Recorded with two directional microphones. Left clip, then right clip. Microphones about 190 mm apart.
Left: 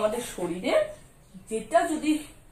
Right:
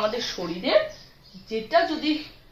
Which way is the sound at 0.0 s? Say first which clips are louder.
Right 1 dB; centre (ahead or behind).